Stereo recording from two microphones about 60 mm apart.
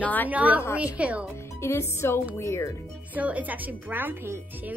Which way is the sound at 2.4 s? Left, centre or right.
Left.